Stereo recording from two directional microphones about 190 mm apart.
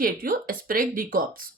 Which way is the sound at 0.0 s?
50° right (ahead or behind).